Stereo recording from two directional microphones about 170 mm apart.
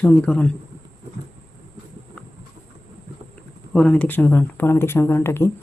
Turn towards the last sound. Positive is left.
turn(degrees=15)  # may be behind; listen again after turning